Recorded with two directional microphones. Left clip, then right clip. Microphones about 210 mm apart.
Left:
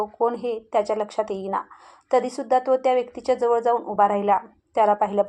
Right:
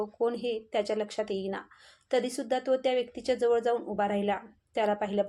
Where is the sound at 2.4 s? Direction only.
50° left (ahead or behind).